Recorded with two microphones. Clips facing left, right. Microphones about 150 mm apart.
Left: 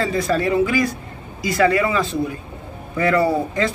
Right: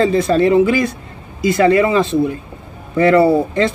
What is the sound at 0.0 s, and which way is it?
Speech, 25° right (ahead or behind).